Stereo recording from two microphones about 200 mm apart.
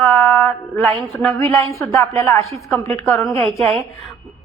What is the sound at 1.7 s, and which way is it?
A woman's voice, 15° left (ahead or behind).